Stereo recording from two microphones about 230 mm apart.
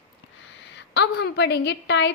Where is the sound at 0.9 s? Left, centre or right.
Left.